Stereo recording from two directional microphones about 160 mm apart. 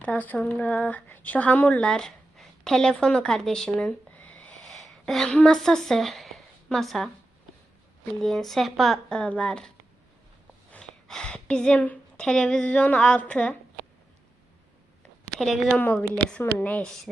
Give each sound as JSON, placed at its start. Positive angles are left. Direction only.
{"t": 0.0, "sound": "speech", "side_deg": 10}
{"t": 8.2, "sound": "a woman's voice", "side_deg": 0}
{"t": 15.4, "sound": "speech", "side_deg": 0}
{"t": 15.7, "sound": "a woman's voice", "side_deg": 10}